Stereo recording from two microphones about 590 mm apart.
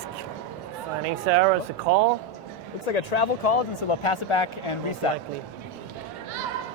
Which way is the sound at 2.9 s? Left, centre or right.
Left.